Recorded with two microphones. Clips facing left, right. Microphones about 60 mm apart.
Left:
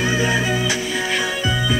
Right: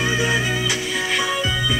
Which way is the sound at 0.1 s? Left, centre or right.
Centre.